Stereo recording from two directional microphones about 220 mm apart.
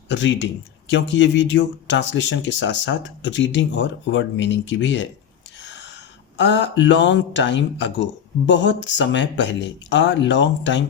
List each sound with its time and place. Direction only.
0.1 s speech: 55° left (ahead or behind)